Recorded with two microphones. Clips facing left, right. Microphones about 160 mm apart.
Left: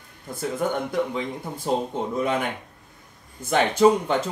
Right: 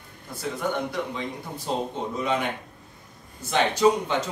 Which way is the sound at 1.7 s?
50° left (ahead or behind).